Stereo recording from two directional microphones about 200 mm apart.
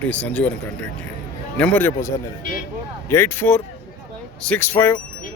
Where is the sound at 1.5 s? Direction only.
5° left (ahead or behind).